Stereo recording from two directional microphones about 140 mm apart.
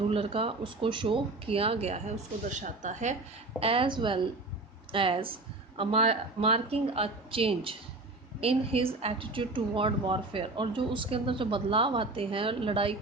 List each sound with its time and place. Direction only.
0.1 s speech: 45° right (ahead or behind); by 3.2 s 60° right (ahead or behind)
3.6 s speech: 40° right (ahead or behind)